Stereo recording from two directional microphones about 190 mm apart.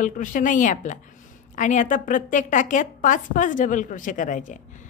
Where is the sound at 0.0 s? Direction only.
45° left (ahead or behind).